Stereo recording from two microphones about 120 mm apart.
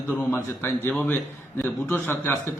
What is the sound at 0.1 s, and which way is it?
A man's voice, 15° left (ahead or behind).